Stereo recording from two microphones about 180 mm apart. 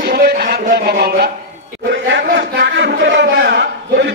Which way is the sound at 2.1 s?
85° right.